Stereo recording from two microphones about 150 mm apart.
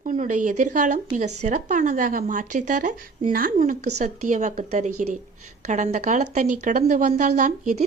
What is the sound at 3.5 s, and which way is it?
A woman's voice, 50° right (ahead or behind).